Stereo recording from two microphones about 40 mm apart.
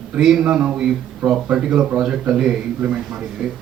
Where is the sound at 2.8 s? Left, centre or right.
Right.